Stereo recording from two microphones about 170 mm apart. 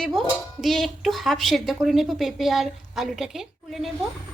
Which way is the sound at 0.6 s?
Centre (ahead or behind).